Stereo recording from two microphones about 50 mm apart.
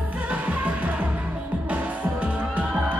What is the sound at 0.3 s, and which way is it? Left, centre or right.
Music, right.